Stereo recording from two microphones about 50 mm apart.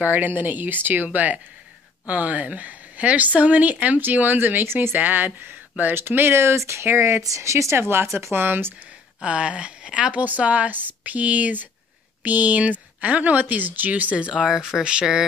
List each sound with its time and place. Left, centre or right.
0.0 s a woman's voice: right
5.9 s speech: right
7.9 s speech: right
9.2 s speech: right
14.5 s speech: centre